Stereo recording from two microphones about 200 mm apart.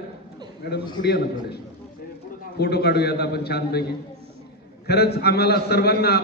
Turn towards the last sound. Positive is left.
turn(degrees=55)  # may be behind; listen again after turning